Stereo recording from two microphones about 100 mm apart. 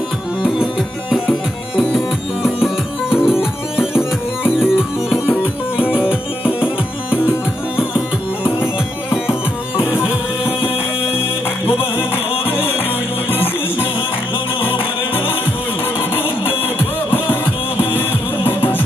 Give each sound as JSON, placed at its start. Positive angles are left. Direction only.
{"t": 1.8, "sound": "music", "side_deg": 0}
{"t": 9.1, "sound": "music", "side_deg": -5}
{"t": 9.8, "sound": "music", "side_deg": 25}
{"t": 13.3, "sound": "music", "side_deg": 70}
{"t": 17.1, "sound": "music", "side_deg": 20}